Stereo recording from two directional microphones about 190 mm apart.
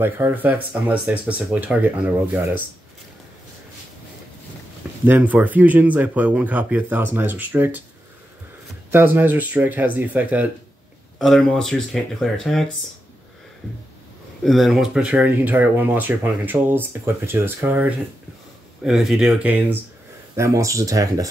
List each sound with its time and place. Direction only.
0.0 s speech: 10° right (ahead or behind)
5.0 s speech: 10° right (ahead or behind)
8.9 s speech: 10° right (ahead or behind)
14.4 s speech: centre (ahead or behind); by 21.3 s 15° right (ahead or behind)